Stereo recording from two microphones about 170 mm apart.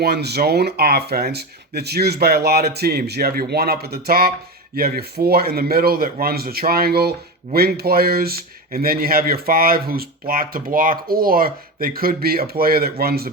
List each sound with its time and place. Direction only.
0.0 s speech: 70° right (ahead or behind)